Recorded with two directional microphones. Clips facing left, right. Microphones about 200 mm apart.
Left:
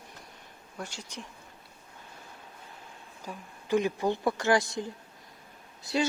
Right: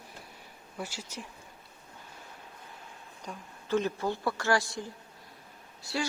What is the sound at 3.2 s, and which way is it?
Speech, 15° left (ahead or behind).